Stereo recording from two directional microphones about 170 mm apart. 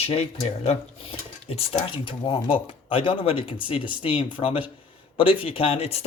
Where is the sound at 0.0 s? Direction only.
35° left (ahead or behind).